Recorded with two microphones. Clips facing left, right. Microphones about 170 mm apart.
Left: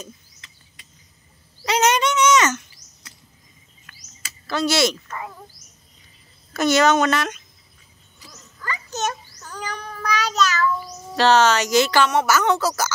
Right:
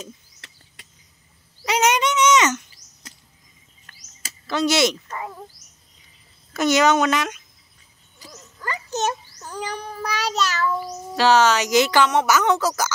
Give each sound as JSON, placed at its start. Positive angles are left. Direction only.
{"t": 1.6, "sound": "bird", "side_deg": -15}
{"t": 3.9, "sound": "a sound", "side_deg": -35}
{"t": 4.5, "sound": "speech", "side_deg": -20}
{"t": 6.5, "sound": "a woman's voice", "side_deg": -15}
{"t": 8.2, "sound": "a sound", "side_deg": -30}
{"t": 9.8, "sound": "child singing", "side_deg": -30}
{"t": 11.1, "sound": "a woman's voice", "side_deg": -10}